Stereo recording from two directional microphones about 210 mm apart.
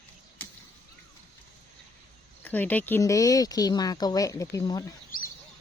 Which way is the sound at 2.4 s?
10° left (ahead or behind).